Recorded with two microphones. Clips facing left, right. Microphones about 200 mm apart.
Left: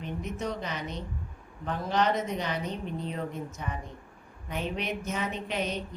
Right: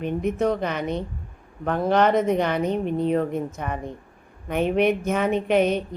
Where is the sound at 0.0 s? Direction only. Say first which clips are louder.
Right 11 dB; 55° right (ahead or behind).